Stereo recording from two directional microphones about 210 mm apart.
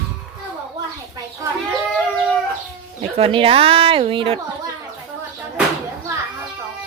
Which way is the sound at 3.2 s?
25° right (ahead or behind).